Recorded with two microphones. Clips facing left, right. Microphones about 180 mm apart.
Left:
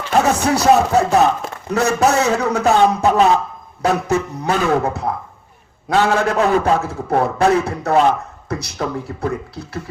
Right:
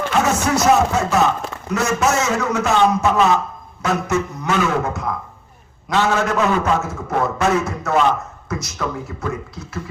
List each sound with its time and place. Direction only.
0.1 s music: 35° left (ahead or behind)
1.7 s a man's voice: 35° left (ahead or behind)